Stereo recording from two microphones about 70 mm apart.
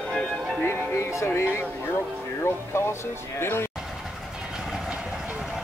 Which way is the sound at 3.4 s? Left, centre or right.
Left.